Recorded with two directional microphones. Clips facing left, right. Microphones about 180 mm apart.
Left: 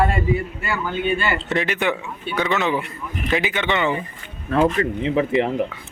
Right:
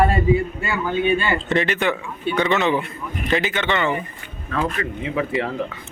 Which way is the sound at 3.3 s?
10° left (ahead or behind).